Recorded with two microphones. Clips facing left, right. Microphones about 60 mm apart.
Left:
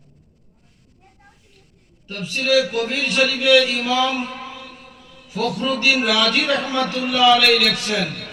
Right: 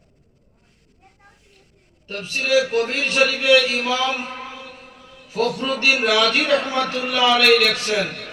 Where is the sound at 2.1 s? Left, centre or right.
Centre.